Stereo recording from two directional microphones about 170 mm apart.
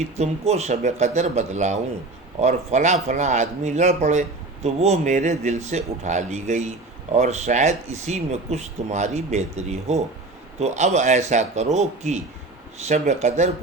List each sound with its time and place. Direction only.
0.0 s speech: 40° right (ahead or behind)